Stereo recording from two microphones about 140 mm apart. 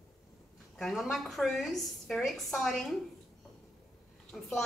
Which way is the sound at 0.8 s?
Centre (ahead or behind).